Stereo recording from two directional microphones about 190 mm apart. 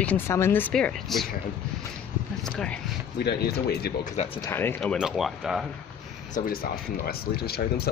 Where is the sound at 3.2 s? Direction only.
55° left (ahead or behind).